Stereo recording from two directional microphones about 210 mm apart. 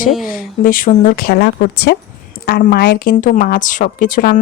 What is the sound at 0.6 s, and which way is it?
A woman's voice, 40° left (ahead or behind).